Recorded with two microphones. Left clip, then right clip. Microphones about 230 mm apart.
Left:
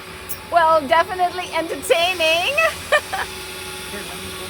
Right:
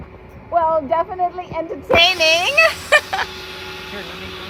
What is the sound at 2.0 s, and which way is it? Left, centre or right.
Speech, centre.